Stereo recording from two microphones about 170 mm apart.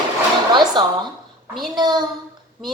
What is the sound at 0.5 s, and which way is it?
A woman's voice, 25° right (ahead or behind).